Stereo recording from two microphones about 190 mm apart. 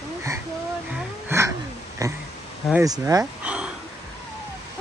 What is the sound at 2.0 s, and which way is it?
Speech, 15° right (ahead or behind).